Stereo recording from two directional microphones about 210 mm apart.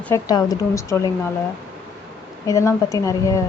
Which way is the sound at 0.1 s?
20° left (ahead or behind).